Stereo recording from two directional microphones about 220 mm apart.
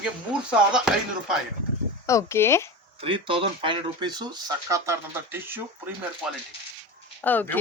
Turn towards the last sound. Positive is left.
turn(degrees=10)  # may be behind; listen again after turning